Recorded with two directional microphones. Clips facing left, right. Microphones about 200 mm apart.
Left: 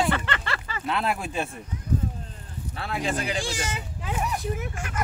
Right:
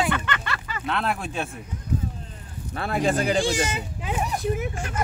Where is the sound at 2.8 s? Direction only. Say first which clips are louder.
Right 5 dB; 50° right (ahead or behind).